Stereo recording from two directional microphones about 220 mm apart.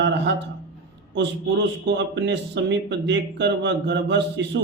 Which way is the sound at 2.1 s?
50° right (ahead or behind).